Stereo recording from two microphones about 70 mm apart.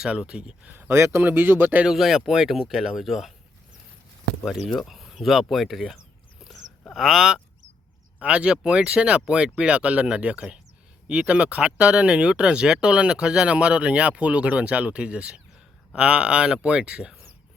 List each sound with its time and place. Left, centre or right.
0.0 s speech: centre
0.7 s speech: right
0.9 s a man's voice: right
1.2 s speech: right
1.8 s speech: centre
4.8 s speech: centre
6.4 s a sound: centre
6.9 s speech: centre
8.2 s speech: centre